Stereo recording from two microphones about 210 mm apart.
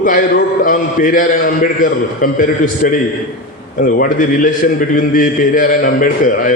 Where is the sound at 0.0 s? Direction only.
40° left (ahead or behind).